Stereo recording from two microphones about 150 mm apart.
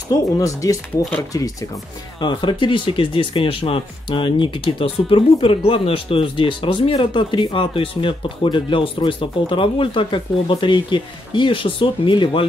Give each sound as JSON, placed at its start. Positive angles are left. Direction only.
{"t": 0.1, "sound": "speech", "side_deg": 20}